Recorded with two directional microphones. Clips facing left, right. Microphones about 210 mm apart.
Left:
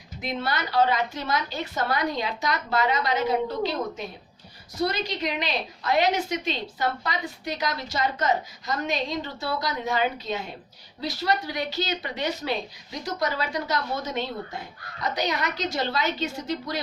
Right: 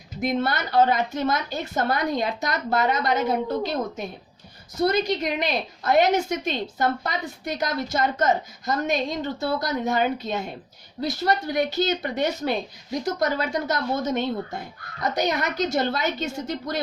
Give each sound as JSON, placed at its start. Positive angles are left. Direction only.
{"t": 0.2, "sound": "a woman's voice", "side_deg": -50}